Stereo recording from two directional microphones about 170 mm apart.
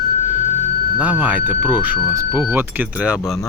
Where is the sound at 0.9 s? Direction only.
10° right (ahead or behind).